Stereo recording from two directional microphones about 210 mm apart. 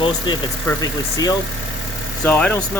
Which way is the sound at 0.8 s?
20° left (ahead or behind).